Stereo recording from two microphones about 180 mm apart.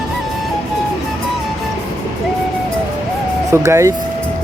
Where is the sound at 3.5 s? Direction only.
15° right (ahead or behind).